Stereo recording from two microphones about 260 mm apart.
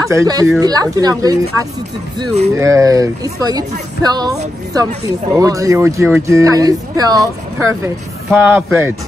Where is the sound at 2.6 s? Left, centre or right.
Centre.